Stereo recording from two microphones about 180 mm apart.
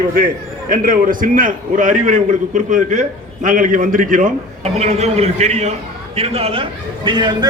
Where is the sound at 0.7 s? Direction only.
50° right (ahead or behind).